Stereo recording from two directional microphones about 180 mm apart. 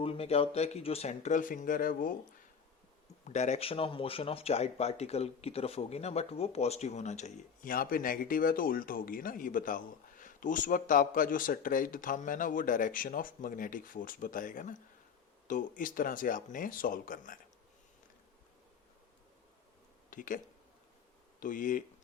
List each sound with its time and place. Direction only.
0.0 s speech: 35° left (ahead or behind); by 2.1 s 50° left (ahead or behind)
3.2 s speech: 40° left (ahead or behind)
20.1 s speech: 50° left (ahead or behind)
21.4 s speech: 50° left (ahead or behind)